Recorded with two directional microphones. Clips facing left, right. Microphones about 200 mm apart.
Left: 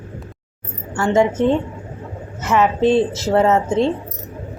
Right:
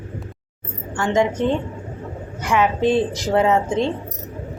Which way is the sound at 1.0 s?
5° left (ahead or behind).